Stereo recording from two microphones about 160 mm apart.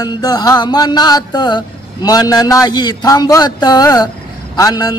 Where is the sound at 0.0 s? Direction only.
25° left (ahead or behind).